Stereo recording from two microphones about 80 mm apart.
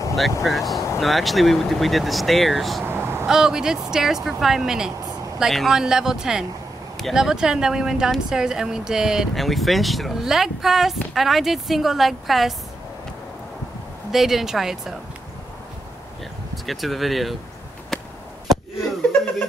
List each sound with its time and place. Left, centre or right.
0.4 s speech: centre
2.8 s a sound: right
3.3 s speech: centre
14.1 s speech: centre
16.6 s speech: centre